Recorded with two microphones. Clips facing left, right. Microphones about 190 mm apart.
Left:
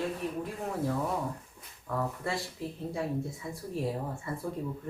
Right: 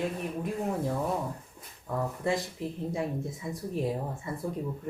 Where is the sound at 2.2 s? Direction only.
15° right (ahead or behind).